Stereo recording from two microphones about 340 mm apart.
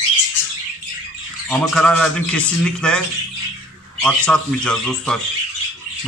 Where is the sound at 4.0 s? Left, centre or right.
Centre.